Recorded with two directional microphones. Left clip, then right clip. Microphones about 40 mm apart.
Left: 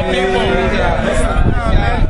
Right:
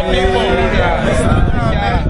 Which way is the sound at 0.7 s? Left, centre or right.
Right.